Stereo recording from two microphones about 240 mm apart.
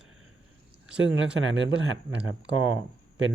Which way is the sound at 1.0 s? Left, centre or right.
Right.